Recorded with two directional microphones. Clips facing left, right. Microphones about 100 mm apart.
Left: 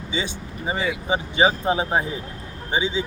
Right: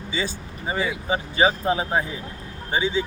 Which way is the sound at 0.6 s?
20° left (ahead or behind).